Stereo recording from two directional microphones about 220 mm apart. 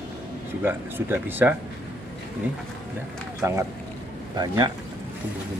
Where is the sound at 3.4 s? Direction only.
15° right (ahead or behind).